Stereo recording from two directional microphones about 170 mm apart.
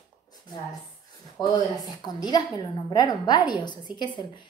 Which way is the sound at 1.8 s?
25° left (ahead or behind).